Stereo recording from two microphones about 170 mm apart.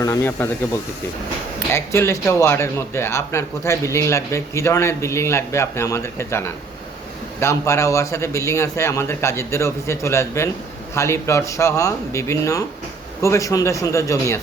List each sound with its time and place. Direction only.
0.0 s speech: 15° left (ahead or behind)